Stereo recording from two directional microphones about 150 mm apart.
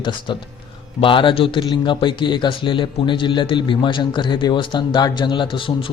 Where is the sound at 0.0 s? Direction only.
35° left (ahead or behind).